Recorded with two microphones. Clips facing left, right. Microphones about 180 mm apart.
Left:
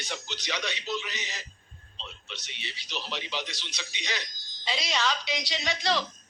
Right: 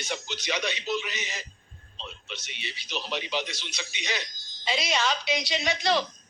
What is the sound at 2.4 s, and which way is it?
Speech, 20° right (ahead or behind).